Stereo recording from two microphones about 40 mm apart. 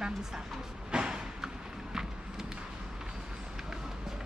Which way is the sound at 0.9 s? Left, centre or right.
Centre.